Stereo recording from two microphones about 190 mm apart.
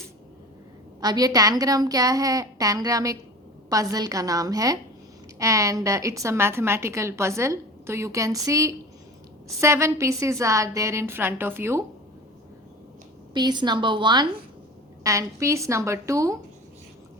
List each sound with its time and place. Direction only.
1.0 s a woman's voice: 20° right (ahead or behind)
13.3 s a woman's voice: 25° right (ahead or behind)